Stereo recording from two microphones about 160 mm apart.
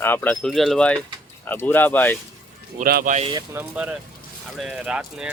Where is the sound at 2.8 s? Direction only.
65° right (ahead or behind).